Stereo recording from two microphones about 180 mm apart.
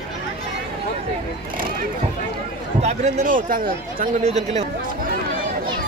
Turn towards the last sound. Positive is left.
turn(degrees=-40)  # may be behind; listen again after turning